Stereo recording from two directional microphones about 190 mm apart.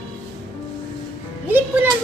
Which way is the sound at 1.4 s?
10° right (ahead or behind).